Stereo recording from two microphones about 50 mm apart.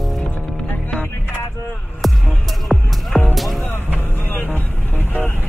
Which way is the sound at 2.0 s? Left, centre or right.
Centre.